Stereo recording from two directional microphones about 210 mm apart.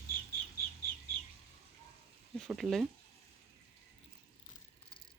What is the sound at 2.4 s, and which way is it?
Speech, centre (ahead or behind).